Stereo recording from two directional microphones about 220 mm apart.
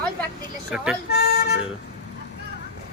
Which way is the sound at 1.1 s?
45° left (ahead or behind).